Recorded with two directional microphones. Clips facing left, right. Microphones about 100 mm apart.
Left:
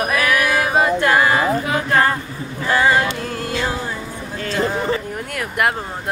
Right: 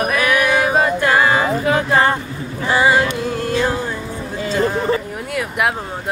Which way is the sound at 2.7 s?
10° right (ahead or behind).